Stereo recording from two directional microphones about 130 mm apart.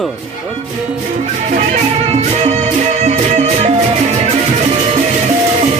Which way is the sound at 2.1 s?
55° right (ahead or behind).